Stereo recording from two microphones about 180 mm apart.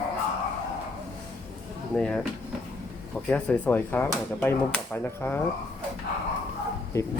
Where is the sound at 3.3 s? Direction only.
10° left (ahead or behind).